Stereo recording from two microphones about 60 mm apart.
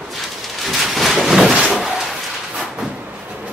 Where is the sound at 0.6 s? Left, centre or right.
Centre.